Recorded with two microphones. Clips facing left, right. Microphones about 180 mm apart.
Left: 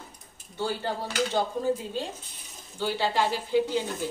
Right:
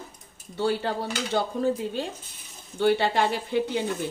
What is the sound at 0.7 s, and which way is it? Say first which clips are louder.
Speech: right 5 dB; 70° right (ahead or behind).